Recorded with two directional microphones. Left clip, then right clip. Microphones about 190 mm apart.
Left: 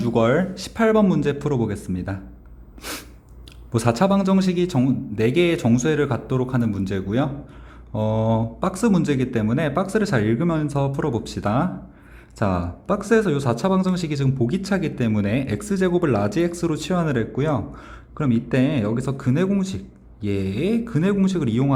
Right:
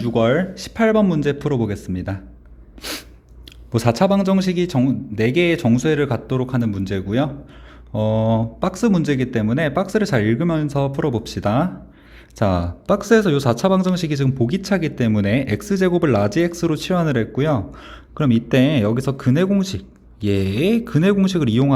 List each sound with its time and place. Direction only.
0.0 s speech: 15° right (ahead or behind)
2.8 s sneeze: 20° right (ahead or behind)
3.7 s speech: 20° right (ahead or behind)